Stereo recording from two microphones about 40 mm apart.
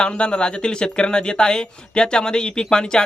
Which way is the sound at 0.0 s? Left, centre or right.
Left.